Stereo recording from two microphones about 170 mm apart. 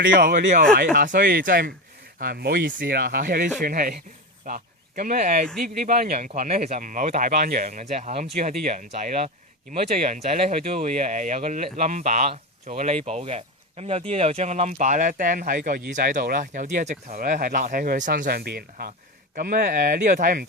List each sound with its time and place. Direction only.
0.0 s speech: 60° right (ahead or behind)
18.3 s speech: 65° right (ahead or behind)